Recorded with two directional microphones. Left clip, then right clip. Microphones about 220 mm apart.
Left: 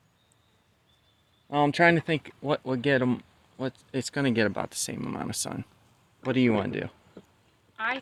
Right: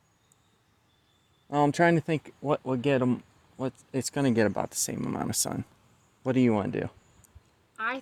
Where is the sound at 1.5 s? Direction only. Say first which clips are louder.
Left 2 dB; 25° right (ahead or behind).